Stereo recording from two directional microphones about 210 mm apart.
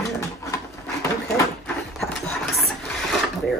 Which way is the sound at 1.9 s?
Centre (ahead or behind).